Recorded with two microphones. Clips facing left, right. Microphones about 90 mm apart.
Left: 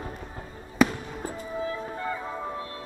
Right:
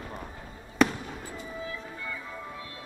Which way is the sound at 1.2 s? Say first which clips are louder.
Left 10 dB; 40° left (ahead or behind).